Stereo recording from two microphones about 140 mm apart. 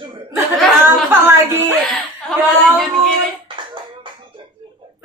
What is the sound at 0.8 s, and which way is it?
Speech, 15° right (ahead or behind).